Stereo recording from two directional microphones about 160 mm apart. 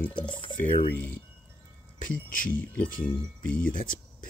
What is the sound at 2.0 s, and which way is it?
Speech, 60° left (ahead or behind).